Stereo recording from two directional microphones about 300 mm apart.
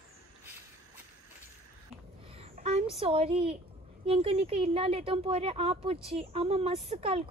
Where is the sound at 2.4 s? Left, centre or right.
Centre.